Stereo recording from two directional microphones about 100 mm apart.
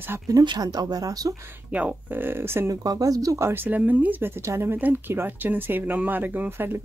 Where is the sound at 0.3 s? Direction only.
40° right (ahead or behind).